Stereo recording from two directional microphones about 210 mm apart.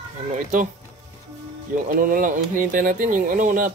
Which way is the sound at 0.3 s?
40° right (ahead or behind).